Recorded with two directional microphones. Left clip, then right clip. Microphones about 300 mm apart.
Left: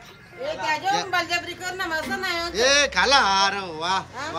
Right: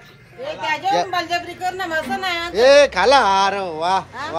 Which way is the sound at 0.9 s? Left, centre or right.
Centre.